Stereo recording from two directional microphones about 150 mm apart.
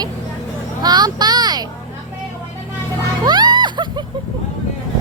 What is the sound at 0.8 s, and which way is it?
Speech, 25° right (ahead or behind).